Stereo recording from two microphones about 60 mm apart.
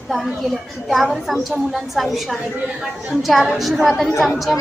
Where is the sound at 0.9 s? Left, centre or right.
Centre.